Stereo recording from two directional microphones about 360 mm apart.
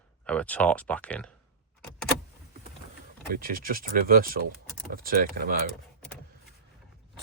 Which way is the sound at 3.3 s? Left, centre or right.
Right.